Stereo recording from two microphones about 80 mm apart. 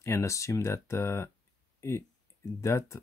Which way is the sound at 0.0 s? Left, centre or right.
Left.